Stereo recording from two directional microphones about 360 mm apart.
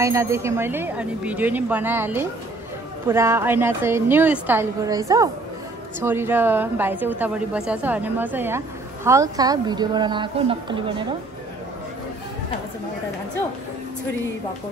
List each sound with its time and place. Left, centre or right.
0.0 s a woman's voice: centre